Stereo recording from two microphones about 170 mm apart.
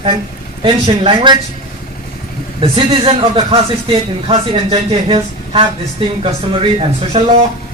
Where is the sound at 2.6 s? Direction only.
30° right (ahead or behind).